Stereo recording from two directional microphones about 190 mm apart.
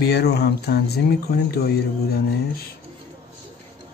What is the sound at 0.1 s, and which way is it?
Speech, 60° left (ahead or behind).